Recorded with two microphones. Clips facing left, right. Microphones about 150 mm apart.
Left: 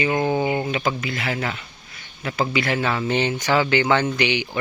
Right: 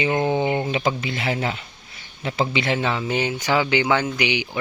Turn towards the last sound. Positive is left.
turn(degrees=-15)  # may be behind; listen again after turning